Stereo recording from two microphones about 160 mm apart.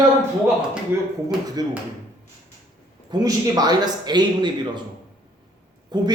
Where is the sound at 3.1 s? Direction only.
25° right (ahead or behind).